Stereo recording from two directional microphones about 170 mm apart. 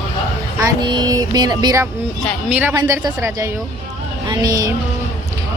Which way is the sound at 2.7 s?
20° right (ahead or behind).